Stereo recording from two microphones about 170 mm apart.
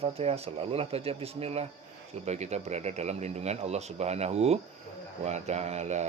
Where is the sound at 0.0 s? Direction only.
35° right (ahead or behind).